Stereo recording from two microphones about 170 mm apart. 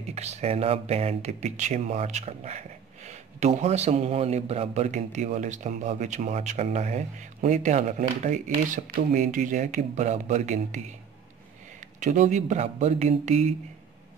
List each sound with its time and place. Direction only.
0.1 s a man's voice: 40° right (ahead or behind)
12.0 s a man's voice: 45° right (ahead or behind)